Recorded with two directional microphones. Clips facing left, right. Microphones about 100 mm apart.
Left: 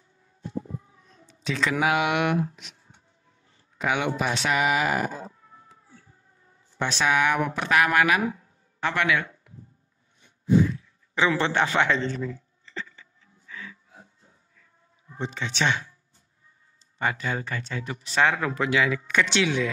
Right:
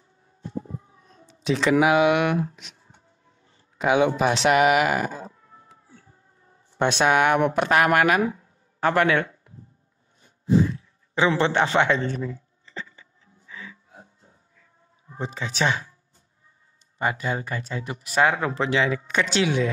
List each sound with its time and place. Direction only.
1.2 s speech: 25° right (ahead or behind)
3.7 s speech: 25° right (ahead or behind)
4.5 s speech: 60° right (ahead or behind)
7.1 s speech: 50° right (ahead or behind)
7.5 s a man's voice: 45° right (ahead or behind)
10.2 s a sound: 30° right (ahead or behind)
12.1 s music: 25° right (ahead or behind)
15.1 s speech: 35° right (ahead or behind)
17.0 s speech: 25° right (ahead or behind)
18.1 s speech: 25° right (ahead or behind)